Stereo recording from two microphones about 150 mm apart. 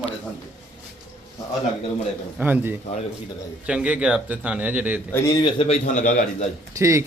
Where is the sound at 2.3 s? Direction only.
10° right (ahead or behind).